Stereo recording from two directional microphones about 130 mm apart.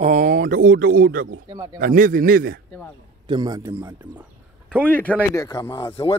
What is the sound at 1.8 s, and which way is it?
Speech, 90° right.